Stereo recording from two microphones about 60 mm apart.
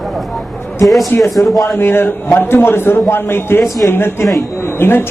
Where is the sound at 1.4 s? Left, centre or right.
Left.